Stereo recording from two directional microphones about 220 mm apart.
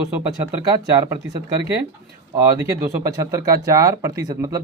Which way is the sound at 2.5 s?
15° right (ahead or behind).